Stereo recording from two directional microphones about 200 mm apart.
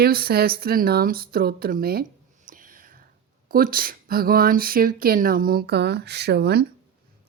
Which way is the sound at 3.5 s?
45° right (ahead or behind).